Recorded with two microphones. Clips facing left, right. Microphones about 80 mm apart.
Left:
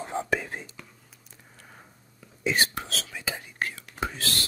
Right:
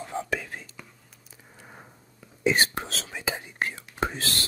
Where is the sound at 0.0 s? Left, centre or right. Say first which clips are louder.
Left 2 dB; left.